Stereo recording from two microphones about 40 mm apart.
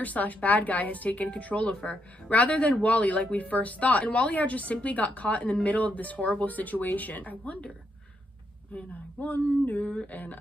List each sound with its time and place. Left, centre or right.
0.0 s speech: left
8.7 s speech: left